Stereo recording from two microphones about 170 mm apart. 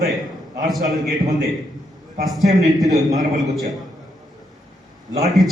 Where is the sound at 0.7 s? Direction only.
Centre (ahead or behind).